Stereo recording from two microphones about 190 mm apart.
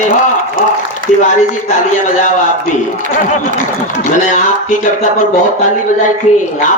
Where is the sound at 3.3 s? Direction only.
40° left (ahead or behind).